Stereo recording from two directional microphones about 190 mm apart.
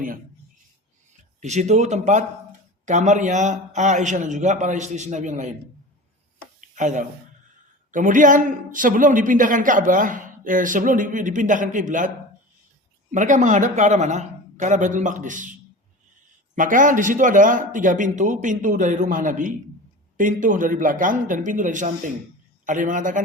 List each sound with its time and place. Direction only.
1.4 s a man's voice: 35° right (ahead or behind)
6.6 s a sound: 40° right (ahead or behind)
7.9 s a man's voice: 45° right (ahead or behind)
16.6 s speech: 45° right (ahead or behind)